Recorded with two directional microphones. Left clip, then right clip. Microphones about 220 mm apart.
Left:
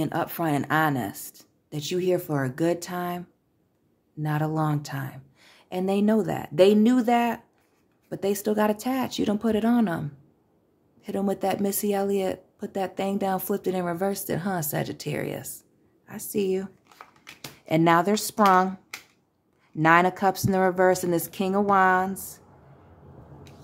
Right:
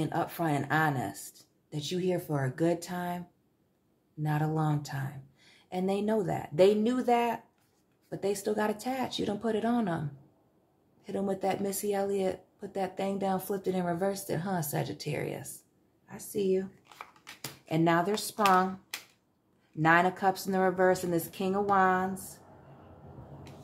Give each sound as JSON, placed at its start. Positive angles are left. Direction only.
{"t": 0.0, "sound": "speech", "side_deg": 40}
{"t": 16.9, "sound": "a sound", "side_deg": 0}
{"t": 17.6, "sound": "speech", "side_deg": 35}
{"t": 19.8, "sound": "speech", "side_deg": 30}